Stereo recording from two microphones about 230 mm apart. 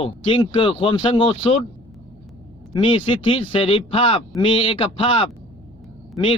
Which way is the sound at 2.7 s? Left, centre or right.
Left.